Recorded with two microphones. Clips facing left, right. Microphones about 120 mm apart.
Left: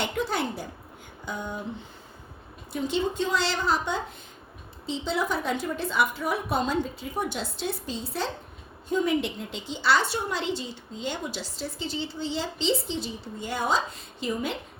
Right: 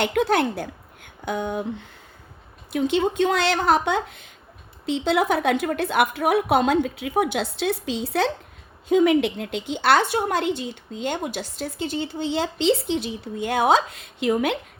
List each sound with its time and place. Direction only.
0.0 s a woman's voice: 70° right (ahead or behind)
2.7 s a woman's voice: 65° right (ahead or behind)